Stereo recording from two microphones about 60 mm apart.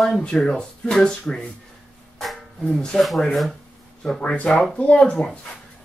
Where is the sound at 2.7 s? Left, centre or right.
Centre.